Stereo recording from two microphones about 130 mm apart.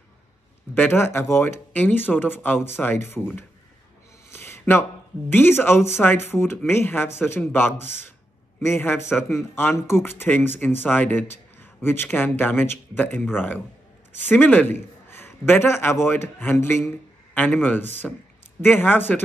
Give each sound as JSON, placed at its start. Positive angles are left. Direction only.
{"t": 0.7, "sound": "speech", "side_deg": 15}
{"t": 4.3, "sound": "a sound", "side_deg": 20}
{"t": 5.3, "sound": "speech", "side_deg": 15}